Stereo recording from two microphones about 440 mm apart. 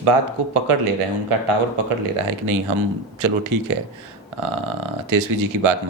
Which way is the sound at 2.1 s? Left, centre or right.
Right.